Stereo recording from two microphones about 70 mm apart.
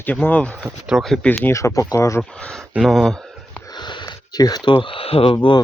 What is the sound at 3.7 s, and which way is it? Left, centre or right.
Sniff, left.